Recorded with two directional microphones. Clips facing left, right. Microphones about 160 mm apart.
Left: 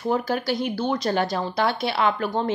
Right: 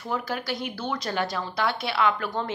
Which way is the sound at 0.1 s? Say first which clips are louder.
Left 5 dB; 35° left (ahead or behind).